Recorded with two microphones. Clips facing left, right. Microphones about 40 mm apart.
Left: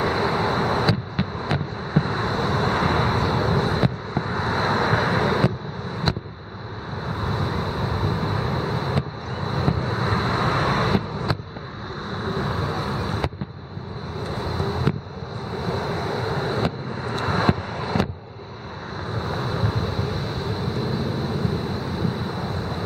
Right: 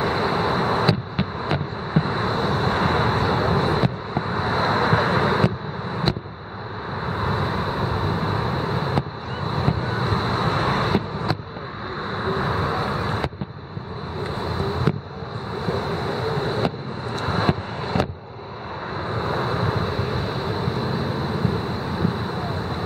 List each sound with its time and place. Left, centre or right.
0.0 s vehicle: centre
7.1 s vehicle: centre
12.1 s vehicle: right
14.4 s vehicle: centre
19.0 s vehicle: centre